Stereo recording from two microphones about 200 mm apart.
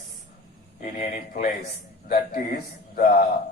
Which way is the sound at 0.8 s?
45° left (ahead or behind).